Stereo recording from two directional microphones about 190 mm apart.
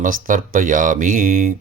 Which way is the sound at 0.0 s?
45° right (ahead or behind).